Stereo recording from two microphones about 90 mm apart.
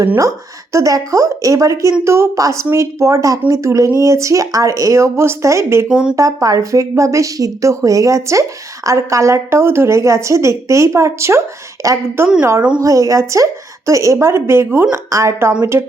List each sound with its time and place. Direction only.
0.2 s speech: 35° right (ahead or behind)
5.9 s speech: 10° right (ahead or behind)
6.1 s a woman's voice: 40° right (ahead or behind)
12.8 s a woman's voice: 40° right (ahead or behind)